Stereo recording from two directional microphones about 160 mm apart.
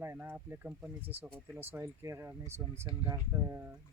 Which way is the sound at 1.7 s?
20° right (ahead or behind).